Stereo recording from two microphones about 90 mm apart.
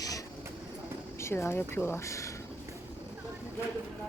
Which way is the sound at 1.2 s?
30° left (ahead or behind).